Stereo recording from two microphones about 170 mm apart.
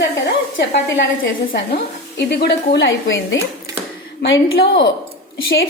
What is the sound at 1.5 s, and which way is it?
A woman's voice, 65° left (ahead or behind).